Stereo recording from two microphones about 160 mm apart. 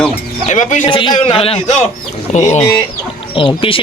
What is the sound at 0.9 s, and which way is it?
Speech, 30° left (ahead or behind).